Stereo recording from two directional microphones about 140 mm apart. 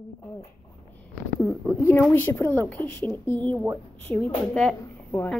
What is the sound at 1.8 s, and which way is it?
Speech, 15° left (ahead or behind).